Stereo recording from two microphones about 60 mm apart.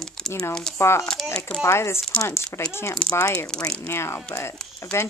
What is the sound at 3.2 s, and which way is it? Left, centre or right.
Speech, left.